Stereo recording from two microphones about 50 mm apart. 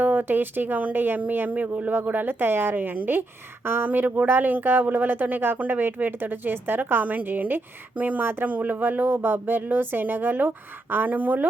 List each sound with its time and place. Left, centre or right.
0.0 s speech: right